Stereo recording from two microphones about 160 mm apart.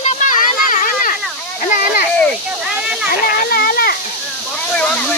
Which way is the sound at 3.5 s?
70° left (ahead or behind).